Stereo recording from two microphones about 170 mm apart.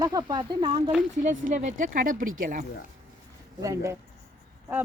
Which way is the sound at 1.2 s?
50° right (ahead or behind).